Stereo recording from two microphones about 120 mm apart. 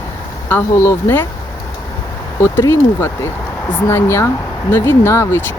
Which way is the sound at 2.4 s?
20° left (ahead or behind).